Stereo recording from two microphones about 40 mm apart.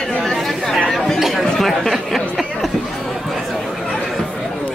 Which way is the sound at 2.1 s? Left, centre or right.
Centre.